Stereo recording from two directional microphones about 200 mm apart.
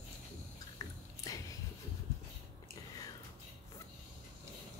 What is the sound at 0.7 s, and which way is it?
Biting, 20° left (ahead or behind).